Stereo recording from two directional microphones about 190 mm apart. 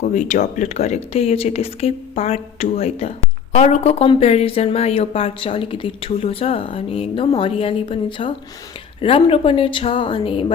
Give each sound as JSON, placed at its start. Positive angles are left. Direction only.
{"t": 0.1, "sound": "speech", "side_deg": 40}